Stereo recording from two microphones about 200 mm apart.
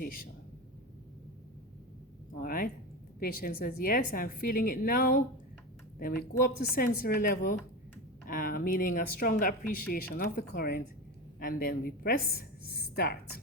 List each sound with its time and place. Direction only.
0.0 s speech: 45° left (ahead or behind)
2.4 s speech: 45° left (ahead or behind)